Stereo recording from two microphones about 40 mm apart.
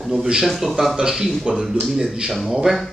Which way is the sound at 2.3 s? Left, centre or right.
Centre.